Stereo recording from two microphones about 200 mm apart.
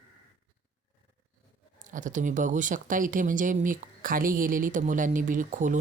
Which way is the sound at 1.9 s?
40° right (ahead or behind).